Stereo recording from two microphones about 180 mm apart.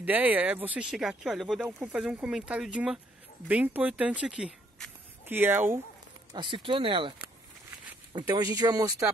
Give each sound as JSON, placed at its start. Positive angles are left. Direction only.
{"t": 0.0, "sound": "speech", "side_deg": -10}
{"t": 6.3, "sound": "speech", "side_deg": -25}
{"t": 8.3, "sound": "speech", "side_deg": -20}